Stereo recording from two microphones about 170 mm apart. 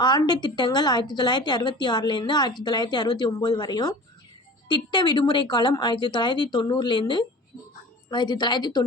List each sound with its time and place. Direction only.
0.0 s a woman's voice: 25° left (ahead or behind)